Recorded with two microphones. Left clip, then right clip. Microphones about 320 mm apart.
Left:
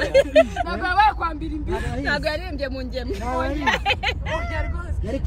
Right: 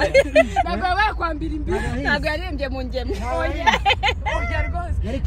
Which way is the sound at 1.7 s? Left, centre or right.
Centre.